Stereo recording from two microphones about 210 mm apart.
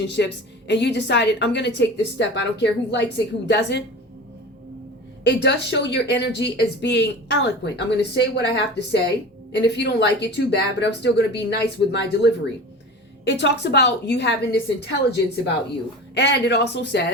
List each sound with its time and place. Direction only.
0.2 s a woman's voice: 55° left (ahead or behind)
5.2 s a woman's voice: 55° left (ahead or behind)
16.1 s speech: 55° left (ahead or behind)